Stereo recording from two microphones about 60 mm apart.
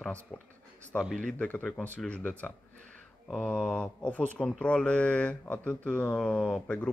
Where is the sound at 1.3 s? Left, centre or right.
Left.